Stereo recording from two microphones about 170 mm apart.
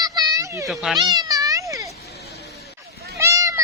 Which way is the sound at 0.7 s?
Centre (ahead or behind).